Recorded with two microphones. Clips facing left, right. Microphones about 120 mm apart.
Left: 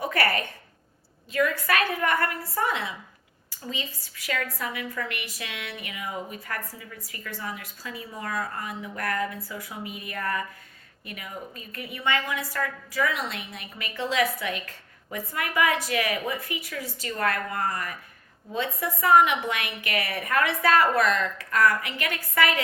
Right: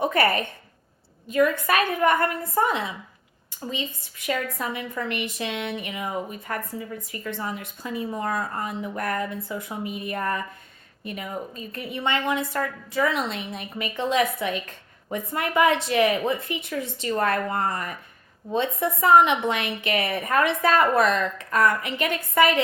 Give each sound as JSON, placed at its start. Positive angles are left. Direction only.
{"t": 0.0, "sound": "a woman's voice", "side_deg": -20}